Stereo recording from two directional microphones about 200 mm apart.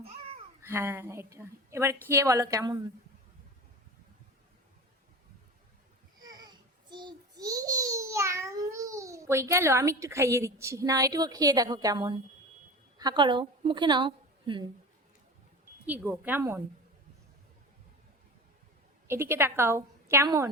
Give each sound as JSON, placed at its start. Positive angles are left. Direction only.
{"t": 0.0, "sound": "babbling", "side_deg": -30}
{"t": 0.7, "sound": "a woman's voice", "side_deg": -10}
{"t": 6.2, "sound": "a sound", "side_deg": -20}
{"t": 13.0, "sound": "a woman's voice", "side_deg": -20}
{"t": 15.9, "sound": "a woman's voice", "side_deg": -10}
{"t": 19.0, "sound": "a woman's voice", "side_deg": -10}